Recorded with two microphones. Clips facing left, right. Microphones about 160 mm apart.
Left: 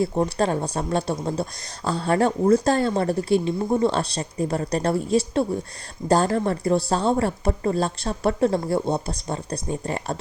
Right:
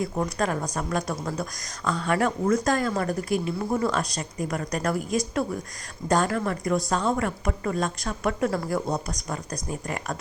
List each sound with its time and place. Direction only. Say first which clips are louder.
0.0 s a woman's voice: left 5 dB; 30° left (ahead or behind)